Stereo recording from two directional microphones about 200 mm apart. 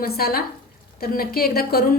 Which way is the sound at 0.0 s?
50° left (ahead or behind).